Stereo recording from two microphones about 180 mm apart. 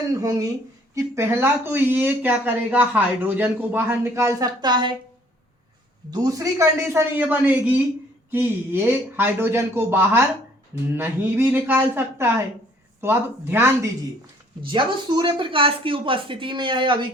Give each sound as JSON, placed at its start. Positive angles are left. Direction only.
{"t": 0.1, "sound": "speech", "side_deg": -20}
{"t": 6.1, "sound": "speech", "side_deg": -20}
{"t": 14.7, "sound": "speech", "side_deg": -25}